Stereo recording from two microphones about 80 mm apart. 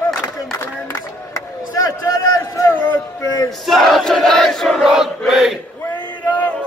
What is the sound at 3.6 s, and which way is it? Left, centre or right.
Crowd, centre.